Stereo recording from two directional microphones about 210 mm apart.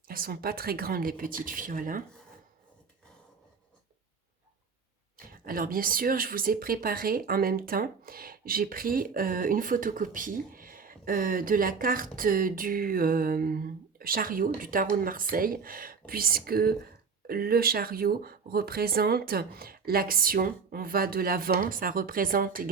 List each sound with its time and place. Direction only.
0.1 s speech: 45° right (ahead or behind)
5.1 s speech: 45° right (ahead or behind)